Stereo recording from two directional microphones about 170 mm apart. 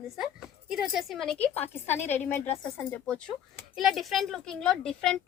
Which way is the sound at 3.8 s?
Centre (ahead or behind).